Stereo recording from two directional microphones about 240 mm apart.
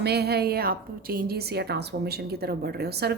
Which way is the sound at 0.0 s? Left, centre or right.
Right.